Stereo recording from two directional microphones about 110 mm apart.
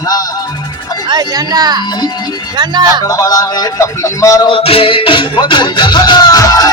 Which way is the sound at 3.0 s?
30° left (ahead or behind).